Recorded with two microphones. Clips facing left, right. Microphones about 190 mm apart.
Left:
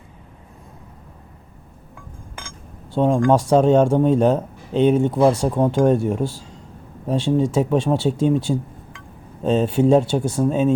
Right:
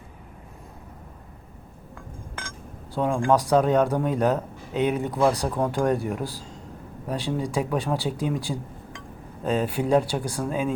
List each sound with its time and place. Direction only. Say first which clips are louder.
2.9 s speech: left 5 dB; 30° left (ahead or behind)